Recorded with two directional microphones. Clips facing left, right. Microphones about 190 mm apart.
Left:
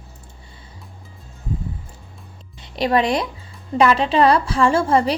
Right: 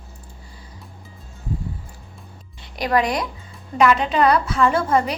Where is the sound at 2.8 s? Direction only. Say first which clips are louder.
Left 2 dB; 25° left (ahead or behind).